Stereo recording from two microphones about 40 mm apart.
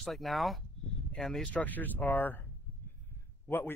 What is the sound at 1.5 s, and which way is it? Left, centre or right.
Speech, left.